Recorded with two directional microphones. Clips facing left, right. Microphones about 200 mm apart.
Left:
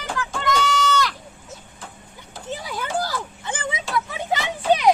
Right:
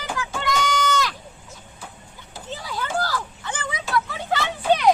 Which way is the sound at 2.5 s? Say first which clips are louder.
Even; 20° left (ahead or behind).